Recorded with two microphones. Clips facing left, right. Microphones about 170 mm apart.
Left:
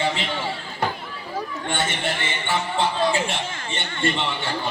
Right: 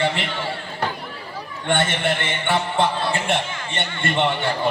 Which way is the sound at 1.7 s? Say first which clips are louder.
Right 6 dB; 60° right (ahead or behind).